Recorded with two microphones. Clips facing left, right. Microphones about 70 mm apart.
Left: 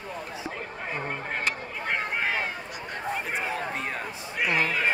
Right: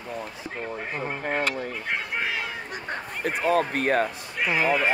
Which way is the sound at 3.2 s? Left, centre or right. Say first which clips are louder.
Right 7 dB; right.